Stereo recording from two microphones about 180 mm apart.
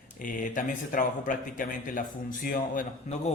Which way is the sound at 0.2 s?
45° left (ahead or behind).